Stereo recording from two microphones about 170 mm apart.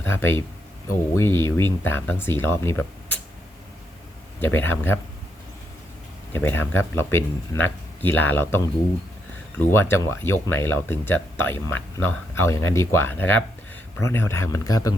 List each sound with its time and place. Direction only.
0.0 s speech: 15° left (ahead or behind)
4.4 s speech: 10° left (ahead or behind)
6.3 s speech: 15° left (ahead or behind)